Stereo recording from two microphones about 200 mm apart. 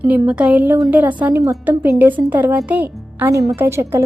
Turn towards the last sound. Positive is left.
turn(degrees=-10)  # may be behind; listen again after turning